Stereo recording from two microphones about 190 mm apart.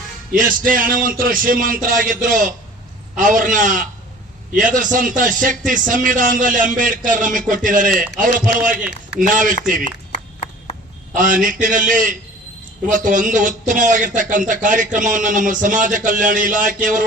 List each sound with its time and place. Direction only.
0.3 s speech: 45° right (ahead or behind)
11.1 s speech: 45° right (ahead or behind)